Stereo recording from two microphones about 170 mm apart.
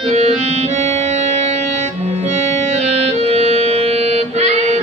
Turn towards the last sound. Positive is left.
turn(degrees=-40)  # may be behind; listen again after turning